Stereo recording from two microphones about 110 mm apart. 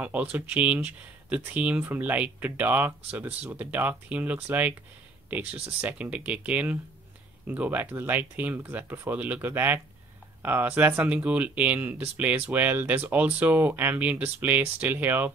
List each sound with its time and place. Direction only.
0.0 s speech: 15° right (ahead or behind)